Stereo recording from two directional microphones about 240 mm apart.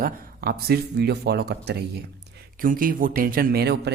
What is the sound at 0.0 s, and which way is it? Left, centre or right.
Speech, right.